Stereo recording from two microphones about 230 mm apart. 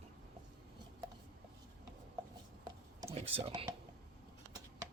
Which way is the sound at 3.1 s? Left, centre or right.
Right.